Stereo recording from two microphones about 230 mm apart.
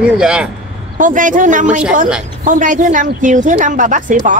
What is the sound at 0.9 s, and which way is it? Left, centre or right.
Speech, right.